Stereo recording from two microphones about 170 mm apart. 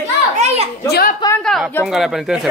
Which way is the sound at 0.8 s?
70° left (ahead or behind).